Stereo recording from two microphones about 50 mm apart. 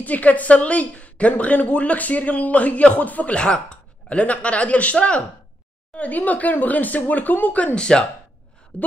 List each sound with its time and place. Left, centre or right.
0.0 s speech: left
3.3 s a sound: centre
4.2 s speech: left